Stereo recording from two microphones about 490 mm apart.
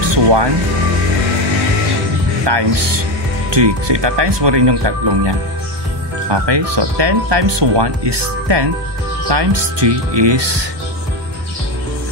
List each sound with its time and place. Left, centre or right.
0.0 s music: right
2.4 s speech: right
6.3 s speech: right